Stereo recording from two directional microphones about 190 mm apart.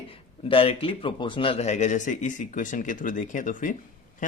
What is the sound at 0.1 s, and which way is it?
Speech, 30° left (ahead or behind).